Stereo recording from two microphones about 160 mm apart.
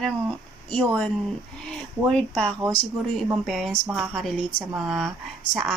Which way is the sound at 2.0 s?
5° left (ahead or behind).